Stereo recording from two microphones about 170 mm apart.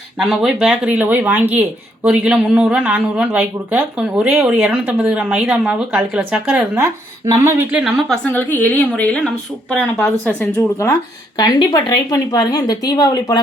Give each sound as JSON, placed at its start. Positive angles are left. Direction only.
{"t": 0.2, "sound": "speech", "side_deg": 0}
{"t": 7.7, "sound": "a woman's voice", "side_deg": -5}
{"t": 11.3, "sound": "a woman's voice", "side_deg": 25}